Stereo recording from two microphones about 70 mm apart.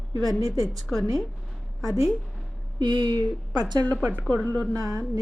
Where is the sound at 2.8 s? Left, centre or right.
Right.